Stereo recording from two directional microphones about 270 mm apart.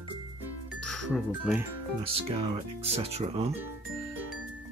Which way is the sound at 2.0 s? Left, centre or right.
Centre.